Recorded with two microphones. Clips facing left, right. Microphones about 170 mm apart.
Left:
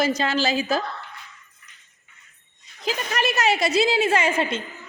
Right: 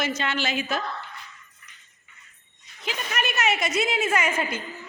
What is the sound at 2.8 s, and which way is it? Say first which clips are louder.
A woman's voice: left 5 dB; 35° left (ahead or behind).